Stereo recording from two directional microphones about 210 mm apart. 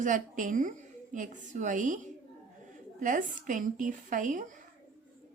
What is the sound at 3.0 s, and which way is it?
A woman's voice, 40° right (ahead or behind).